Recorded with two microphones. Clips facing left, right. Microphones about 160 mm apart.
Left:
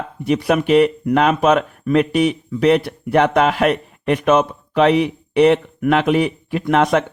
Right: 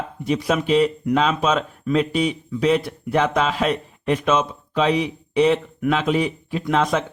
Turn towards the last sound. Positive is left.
turn(degrees=60)  # may be behind; listen again after turning